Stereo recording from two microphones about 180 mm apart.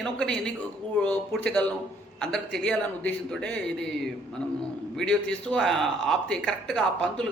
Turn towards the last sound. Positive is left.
turn(degrees=5)  # may be behind; listen again after turning